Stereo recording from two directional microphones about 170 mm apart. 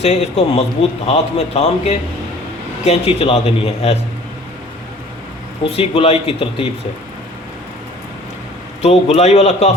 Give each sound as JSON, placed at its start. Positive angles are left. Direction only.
{"t": 0.0, "sound": "a man's voice", "side_deg": 40}
{"t": 5.6, "sound": "a man's voice", "side_deg": 35}
{"t": 8.8, "sound": "a man's voice", "side_deg": 35}